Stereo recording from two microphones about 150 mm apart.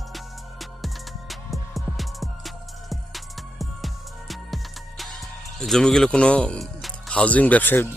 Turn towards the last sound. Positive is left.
turn(degrees=10)  # may be behind; listen again after turning